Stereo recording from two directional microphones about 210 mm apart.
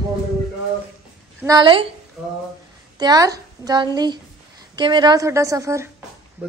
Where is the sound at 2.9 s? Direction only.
20° right (ahead or behind).